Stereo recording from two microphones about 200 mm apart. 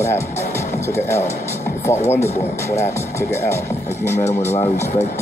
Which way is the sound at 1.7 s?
45° left (ahead or behind).